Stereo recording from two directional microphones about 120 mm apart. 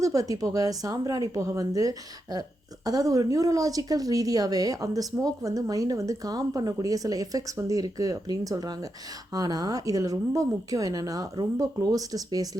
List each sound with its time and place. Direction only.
0.0 s a woman's voice: 30° right (ahead or behind)